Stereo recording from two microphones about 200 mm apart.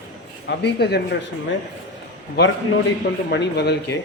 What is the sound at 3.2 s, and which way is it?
Speech, 55° left (ahead or behind).